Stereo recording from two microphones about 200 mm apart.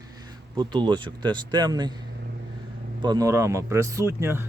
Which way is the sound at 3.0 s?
20° right (ahead or behind).